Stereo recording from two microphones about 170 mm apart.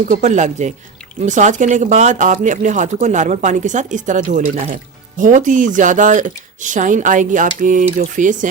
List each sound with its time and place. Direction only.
0.0 s speech: 45° right (ahead or behind)